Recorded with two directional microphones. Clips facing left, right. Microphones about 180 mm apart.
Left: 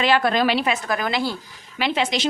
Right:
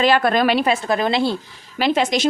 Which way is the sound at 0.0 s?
50° right (ahead or behind).